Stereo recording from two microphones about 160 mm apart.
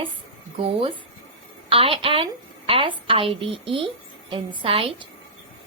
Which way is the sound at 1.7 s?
35° right (ahead or behind).